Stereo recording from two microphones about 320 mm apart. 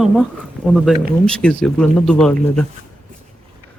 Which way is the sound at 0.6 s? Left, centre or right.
Centre.